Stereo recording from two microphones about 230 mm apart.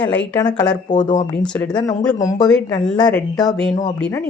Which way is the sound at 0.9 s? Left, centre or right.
Left.